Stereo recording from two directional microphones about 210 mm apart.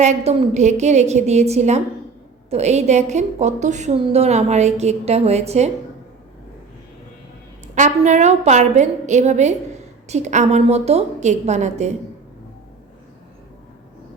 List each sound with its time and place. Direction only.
0.0 s a woman's voice: 30° right (ahead or behind)
7.8 s a woman's voice: 35° right (ahead or behind)